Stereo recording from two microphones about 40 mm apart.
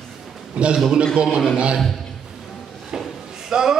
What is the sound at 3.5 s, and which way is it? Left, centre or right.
Speech, centre.